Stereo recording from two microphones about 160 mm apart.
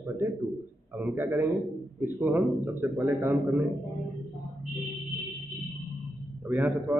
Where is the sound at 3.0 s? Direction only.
20° right (ahead or behind).